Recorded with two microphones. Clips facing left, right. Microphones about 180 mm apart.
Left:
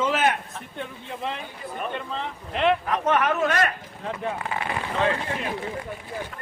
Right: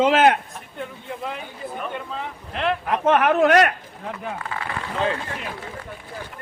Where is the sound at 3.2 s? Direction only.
60° right (ahead or behind).